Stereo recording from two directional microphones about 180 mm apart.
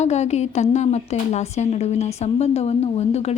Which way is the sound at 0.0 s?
40° left (ahead or behind).